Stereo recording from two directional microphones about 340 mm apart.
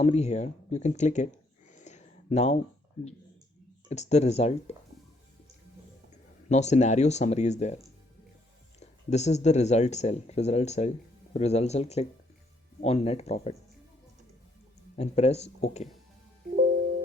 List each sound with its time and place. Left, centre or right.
0.0 s speech: centre
1.7 s a sound: left
3.8 s speech: centre
6.5 s speech: centre
8.8 s speech: centre
14.9 s speech: centre